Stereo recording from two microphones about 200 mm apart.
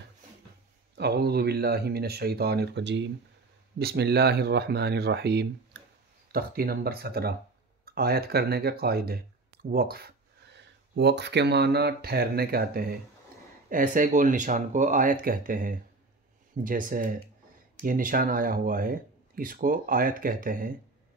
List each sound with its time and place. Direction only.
0.9 s speech: 55° right (ahead or behind)